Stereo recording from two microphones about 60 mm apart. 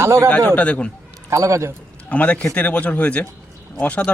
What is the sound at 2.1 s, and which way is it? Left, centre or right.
Speech, left.